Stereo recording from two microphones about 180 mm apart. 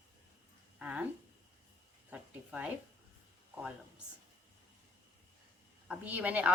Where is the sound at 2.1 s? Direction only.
5° right (ahead or behind).